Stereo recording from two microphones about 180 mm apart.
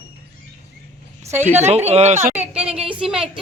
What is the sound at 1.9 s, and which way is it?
Speech, 35° right (ahead or behind).